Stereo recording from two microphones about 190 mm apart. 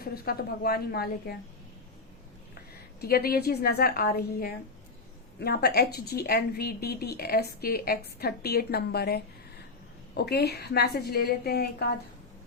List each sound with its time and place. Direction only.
0.0 s a woman's voice: 50° left (ahead or behind)
3.0 s a woman's voice: 55° left (ahead or behind)